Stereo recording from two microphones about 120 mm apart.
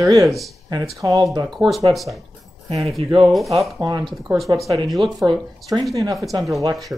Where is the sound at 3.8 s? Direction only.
30° right (ahead or behind).